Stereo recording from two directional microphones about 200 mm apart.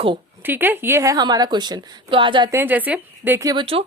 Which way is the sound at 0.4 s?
10° right (ahead or behind).